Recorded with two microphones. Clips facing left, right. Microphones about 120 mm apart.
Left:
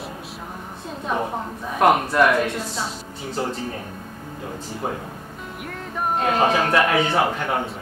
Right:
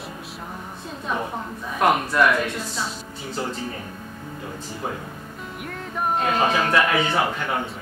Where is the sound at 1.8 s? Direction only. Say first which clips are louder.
Left 2 dB; 45° left (ahead or behind).